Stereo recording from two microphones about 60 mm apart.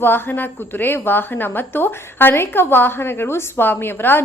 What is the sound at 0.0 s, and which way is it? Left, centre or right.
A woman's voice, left.